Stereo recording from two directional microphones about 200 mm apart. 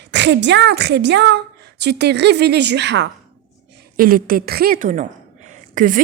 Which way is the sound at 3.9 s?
45° right (ahead or behind).